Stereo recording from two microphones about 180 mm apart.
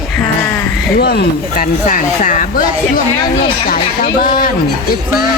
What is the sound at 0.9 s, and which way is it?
Speech, 65° left (ahead or behind).